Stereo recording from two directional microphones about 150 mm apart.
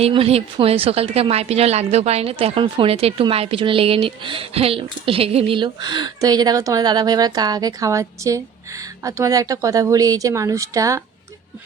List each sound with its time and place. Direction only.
0.0 s a woman's voice: 40° right (ahead or behind); by 11.0 s 20° right (ahead or behind)